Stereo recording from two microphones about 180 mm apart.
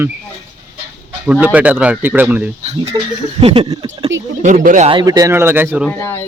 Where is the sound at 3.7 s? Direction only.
25° right (ahead or behind).